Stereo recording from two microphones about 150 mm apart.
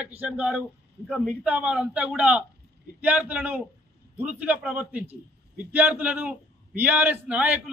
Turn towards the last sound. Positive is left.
turn(degrees=-10)  # may be behind; listen again after turning